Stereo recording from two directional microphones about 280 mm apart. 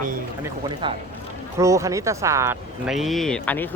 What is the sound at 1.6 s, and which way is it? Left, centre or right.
Speech, centre.